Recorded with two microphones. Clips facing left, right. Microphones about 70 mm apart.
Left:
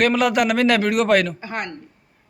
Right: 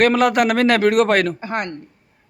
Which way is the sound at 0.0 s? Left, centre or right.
Right.